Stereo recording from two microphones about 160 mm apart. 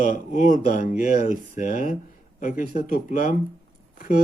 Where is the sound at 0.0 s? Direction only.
60° left (ahead or behind).